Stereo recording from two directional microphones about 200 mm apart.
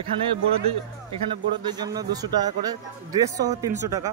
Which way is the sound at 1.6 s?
20° right (ahead or behind).